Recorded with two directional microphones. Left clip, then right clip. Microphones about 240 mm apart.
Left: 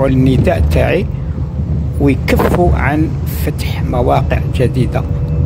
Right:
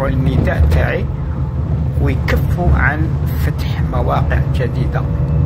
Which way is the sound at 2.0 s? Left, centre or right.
Left.